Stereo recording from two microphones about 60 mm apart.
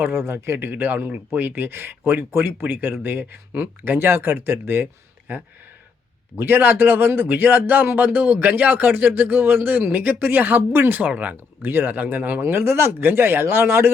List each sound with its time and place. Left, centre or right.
0.1 s a man's voice: right
6.3 s a man's voice: right
11.1 s speech: right
12.4 s a man's voice: right